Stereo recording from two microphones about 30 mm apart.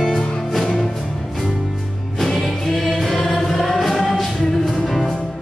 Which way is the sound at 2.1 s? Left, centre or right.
Centre.